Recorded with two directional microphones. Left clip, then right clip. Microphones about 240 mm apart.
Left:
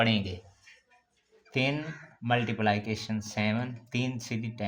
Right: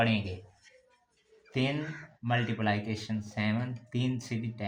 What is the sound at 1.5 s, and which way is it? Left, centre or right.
Speech, left.